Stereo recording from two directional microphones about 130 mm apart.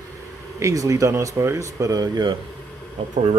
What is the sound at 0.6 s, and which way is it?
Speech, 25° right (ahead or behind).